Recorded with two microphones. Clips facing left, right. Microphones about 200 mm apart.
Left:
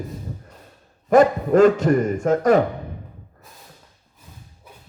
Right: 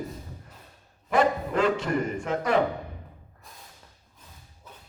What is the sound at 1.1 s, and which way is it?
A man's voice, 45° left (ahead or behind).